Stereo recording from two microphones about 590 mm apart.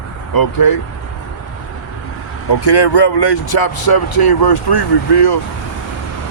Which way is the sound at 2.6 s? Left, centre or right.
Left.